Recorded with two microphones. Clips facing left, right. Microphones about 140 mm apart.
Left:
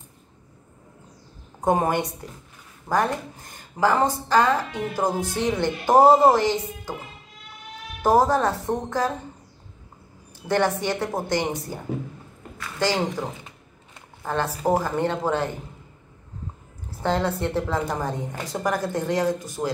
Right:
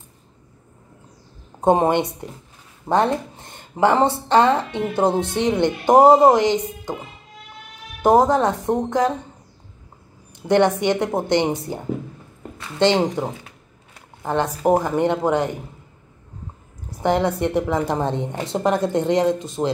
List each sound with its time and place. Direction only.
1.6 s a woman's voice: 25° right (ahead or behind)
8.0 s a woman's voice: 20° right (ahead or behind)
10.5 s a woman's voice: 20° right (ahead or behind)
17.0 s a woman's voice: 15° right (ahead or behind)